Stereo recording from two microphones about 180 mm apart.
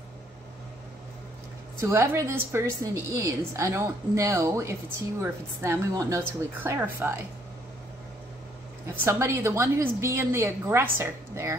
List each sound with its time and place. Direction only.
1.8 s a woman's voice: 15° right (ahead or behind)
8.8 s a woman's voice: 15° right (ahead or behind)